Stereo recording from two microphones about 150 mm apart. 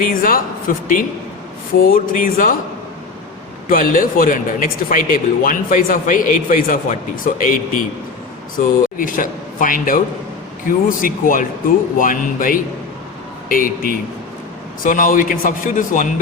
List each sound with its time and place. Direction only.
0.0 s speech: 70° left (ahead or behind)
3.7 s speech: 65° left (ahead or behind)